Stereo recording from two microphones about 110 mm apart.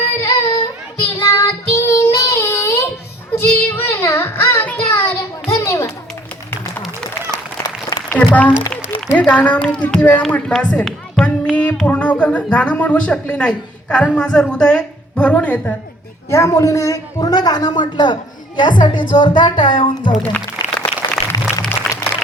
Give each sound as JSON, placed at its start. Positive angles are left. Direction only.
{"t": 0.2, "sound": "a sound", "side_deg": 30}
{"t": 1.3, "sound": "child singing", "side_deg": 25}
{"t": 5.5, "sound": "children playing", "side_deg": 25}
{"t": 7.3, "sound": "applause", "side_deg": 35}
{"t": 8.1, "sound": "a woman's voice", "side_deg": 15}
{"t": 16.3, "sound": "a woman's voice", "side_deg": 25}
{"t": 20.3, "sound": "a sound", "side_deg": 10}